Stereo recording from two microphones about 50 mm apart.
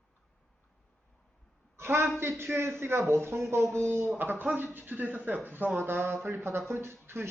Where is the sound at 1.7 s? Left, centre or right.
Right.